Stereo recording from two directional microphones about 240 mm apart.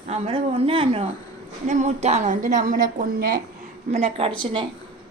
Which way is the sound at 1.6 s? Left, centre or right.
Right.